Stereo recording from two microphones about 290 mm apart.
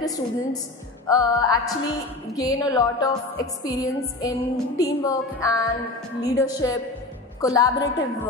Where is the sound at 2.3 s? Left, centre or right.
Centre.